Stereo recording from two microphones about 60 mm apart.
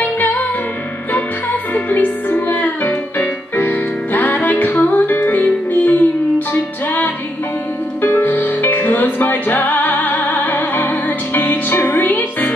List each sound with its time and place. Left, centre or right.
0.0 s music: left